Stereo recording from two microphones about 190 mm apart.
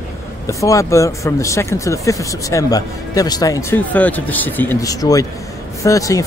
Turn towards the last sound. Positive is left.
turn(degrees=15)  # may be behind; listen again after turning